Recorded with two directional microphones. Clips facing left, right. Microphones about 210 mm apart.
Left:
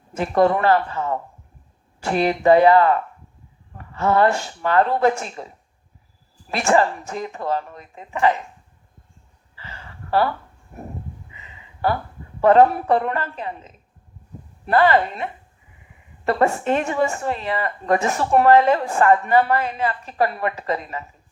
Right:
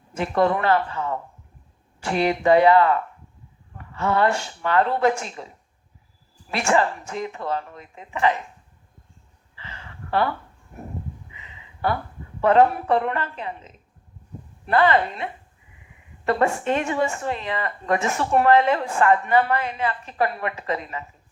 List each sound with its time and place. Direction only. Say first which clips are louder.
0.2 s a woman's voice: left 3 dB; 40° left (ahead or behind)
2.0 s a woman's voice: left 3 dB; 40° left (ahead or behind)
3.9 s a woman's voice: left 3 dB; 40° left (ahead or behind)
9.6 s a sound: left 1 dB; 40° left (ahead or behind)
12.4 s a woman's voice: left 3 dB; 40° left (ahead or behind)
16.2 s a woman's voice: left 2 dB; 35° left (ahead or behind)